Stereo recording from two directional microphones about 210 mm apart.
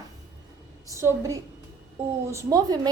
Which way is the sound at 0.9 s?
15° right (ahead or behind).